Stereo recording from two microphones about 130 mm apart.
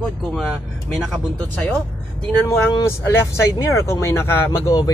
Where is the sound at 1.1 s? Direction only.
5° left (ahead or behind).